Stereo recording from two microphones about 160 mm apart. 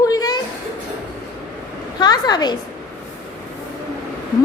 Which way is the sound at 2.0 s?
25° left (ahead or behind).